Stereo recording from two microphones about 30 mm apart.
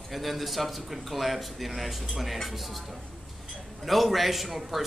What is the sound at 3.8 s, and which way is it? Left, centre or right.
Speech, centre.